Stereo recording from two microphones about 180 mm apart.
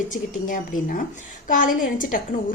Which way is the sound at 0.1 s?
45° left (ahead or behind).